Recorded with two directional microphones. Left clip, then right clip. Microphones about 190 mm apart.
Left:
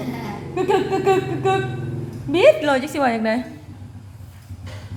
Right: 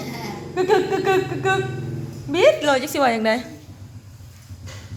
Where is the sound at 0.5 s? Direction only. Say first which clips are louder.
Right 1 dB; 10° right (ahead or behind).